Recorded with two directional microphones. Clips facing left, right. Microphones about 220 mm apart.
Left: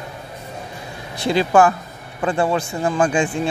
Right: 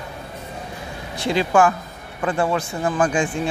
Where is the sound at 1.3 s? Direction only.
35° left (ahead or behind).